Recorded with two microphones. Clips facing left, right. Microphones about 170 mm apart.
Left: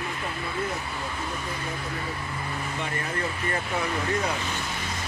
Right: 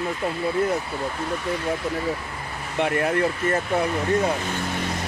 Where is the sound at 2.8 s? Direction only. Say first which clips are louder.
Right 12 dB; 65° right (ahead or behind).